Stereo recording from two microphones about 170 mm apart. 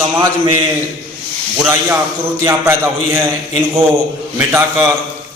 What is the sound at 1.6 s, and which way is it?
A man's voice, 15° right (ahead or behind).